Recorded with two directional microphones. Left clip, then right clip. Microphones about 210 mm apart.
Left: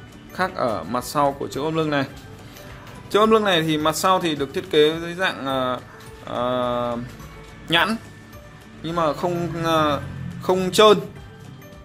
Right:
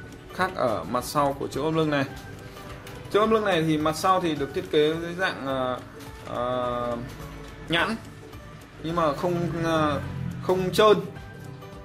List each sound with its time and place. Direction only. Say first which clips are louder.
0.4 s speech: left 2 dB; 15° left (ahead or behind)
3.1 s a man's voice: left 5 dB; 25° left (ahead or behind)